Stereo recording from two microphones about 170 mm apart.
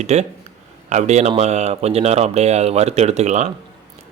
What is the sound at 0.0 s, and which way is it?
A man's voice, 40° right (ahead or behind).